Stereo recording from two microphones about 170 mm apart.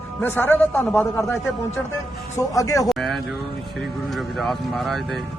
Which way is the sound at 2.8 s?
Centre (ahead or behind).